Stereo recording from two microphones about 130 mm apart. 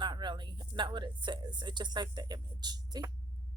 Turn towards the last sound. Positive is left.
turn(degrees=-30)  # may be behind; listen again after turning